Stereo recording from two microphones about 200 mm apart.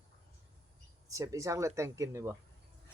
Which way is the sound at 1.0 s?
15° right (ahead or behind).